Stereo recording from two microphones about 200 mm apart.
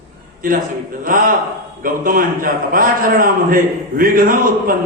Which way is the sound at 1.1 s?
45° right (ahead or behind).